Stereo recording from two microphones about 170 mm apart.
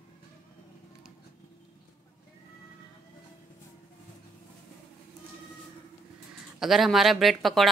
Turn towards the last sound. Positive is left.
turn(degrees=0)  # may be behind; listen again after turning